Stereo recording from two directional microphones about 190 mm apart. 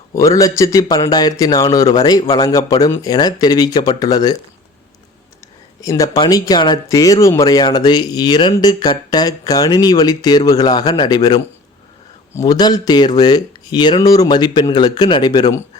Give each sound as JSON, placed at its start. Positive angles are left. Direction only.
{"t": 0.1, "sound": "speech", "side_deg": 15}
{"t": 5.8, "sound": "speech", "side_deg": 20}